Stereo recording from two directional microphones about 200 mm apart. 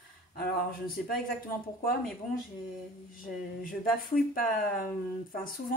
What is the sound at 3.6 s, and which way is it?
Speech, 45° left (ahead or behind).